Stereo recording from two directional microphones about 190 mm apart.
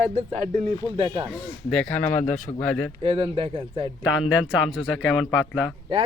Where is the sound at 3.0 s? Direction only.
30° right (ahead or behind).